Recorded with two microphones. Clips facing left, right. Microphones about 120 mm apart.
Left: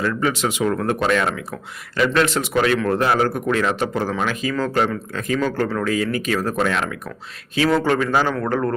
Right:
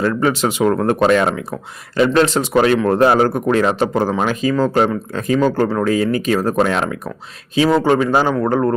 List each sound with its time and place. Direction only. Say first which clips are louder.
0.0 s speech: right 5 dB; 40° right (ahead or behind)
7.5 s speech: right 4 dB; 20° right (ahead or behind)